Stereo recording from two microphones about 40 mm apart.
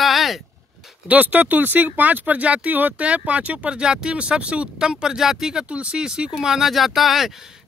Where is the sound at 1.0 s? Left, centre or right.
Right.